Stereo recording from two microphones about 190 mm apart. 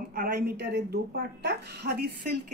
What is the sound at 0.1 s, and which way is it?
Speech, 55° right (ahead or behind).